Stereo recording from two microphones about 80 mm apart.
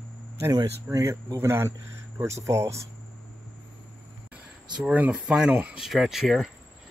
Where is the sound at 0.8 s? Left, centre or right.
Right.